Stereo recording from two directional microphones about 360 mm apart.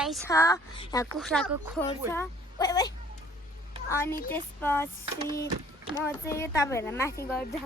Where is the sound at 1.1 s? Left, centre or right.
Centre.